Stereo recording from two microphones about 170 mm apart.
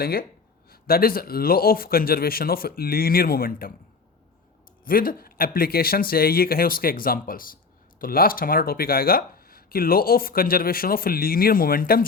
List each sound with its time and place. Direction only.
0.0 s speech: 60° left (ahead or behind)
4.9 s speech: 55° left (ahead or behind)